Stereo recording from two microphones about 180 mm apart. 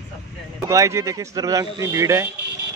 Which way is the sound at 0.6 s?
15° right (ahead or behind).